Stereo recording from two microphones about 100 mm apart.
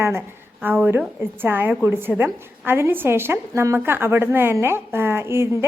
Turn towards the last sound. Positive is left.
turn(degrees=-25)  # may be behind; listen again after turning